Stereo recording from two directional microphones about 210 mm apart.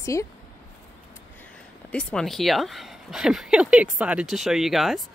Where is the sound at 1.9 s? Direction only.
5° left (ahead or behind).